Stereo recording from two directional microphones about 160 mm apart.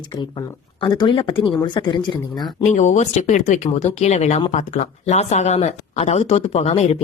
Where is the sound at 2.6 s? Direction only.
45° left (ahead or behind).